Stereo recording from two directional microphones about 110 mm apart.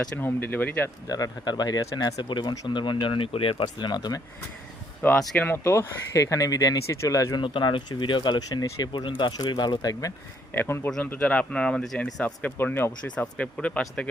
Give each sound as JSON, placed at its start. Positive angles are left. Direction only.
{"t": 0.2, "sound": "speech", "side_deg": 20}
{"t": 1.0, "sound": "speech", "side_deg": 35}
{"t": 5.0, "sound": "speech", "side_deg": 15}
{"t": 7.4, "sound": "speech", "side_deg": 50}
{"t": 10.5, "sound": "speech", "side_deg": 20}
{"t": 12.2, "sound": "speech", "side_deg": 15}
{"t": 13.1, "sound": "speech", "side_deg": 10}